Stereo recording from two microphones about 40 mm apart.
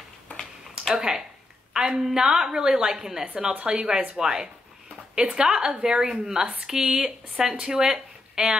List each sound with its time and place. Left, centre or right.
0.7 s speech: centre
1.7 s a sound: centre
2.0 s a woman's voice: centre